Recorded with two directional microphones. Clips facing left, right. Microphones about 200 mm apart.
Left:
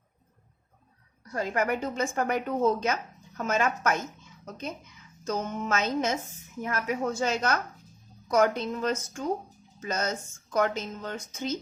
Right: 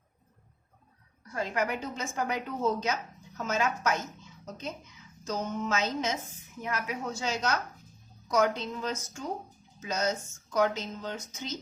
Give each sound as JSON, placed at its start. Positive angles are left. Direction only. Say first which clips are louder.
{"t": 1.3, "sound": "speech", "louder": "left 3 dB", "side_deg": 45}
{"t": 5.2, "sound": "speech", "louder": "left 2 dB", "side_deg": 55}